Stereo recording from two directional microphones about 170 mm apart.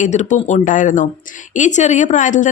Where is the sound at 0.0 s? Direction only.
45° left (ahead or behind).